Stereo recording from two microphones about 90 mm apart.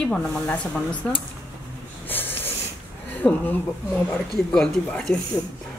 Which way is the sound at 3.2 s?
5° left (ahead or behind).